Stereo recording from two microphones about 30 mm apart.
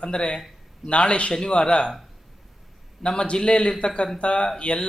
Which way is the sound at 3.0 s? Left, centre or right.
Left.